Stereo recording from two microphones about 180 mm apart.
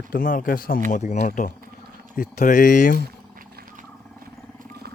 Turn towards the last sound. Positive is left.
turn(degrees=-50)  # may be behind; listen again after turning